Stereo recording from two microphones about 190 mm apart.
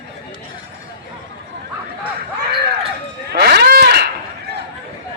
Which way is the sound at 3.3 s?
55° right (ahead or behind).